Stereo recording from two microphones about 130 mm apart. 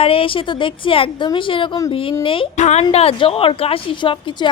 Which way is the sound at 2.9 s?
50° left (ahead or behind).